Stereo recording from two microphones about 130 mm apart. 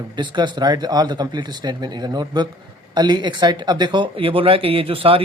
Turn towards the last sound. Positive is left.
turn(degrees=-45)  # may be behind; listen again after turning